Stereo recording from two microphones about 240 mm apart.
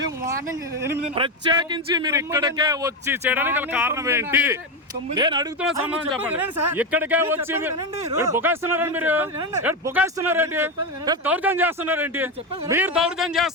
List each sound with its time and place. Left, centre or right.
1.1 s speech: centre
5.7 s speech: centre